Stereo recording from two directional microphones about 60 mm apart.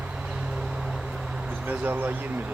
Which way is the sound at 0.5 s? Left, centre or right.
Centre.